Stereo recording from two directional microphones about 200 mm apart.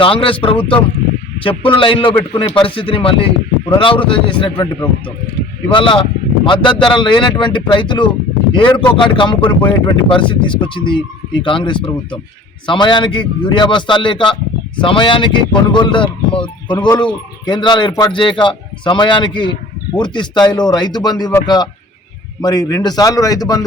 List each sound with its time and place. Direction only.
0.0 s speech: 25° left (ahead or behind)
5.7 s speech: 25° left (ahead or behind)